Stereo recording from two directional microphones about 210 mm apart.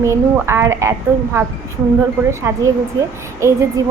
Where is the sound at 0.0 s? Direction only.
15° right (ahead or behind).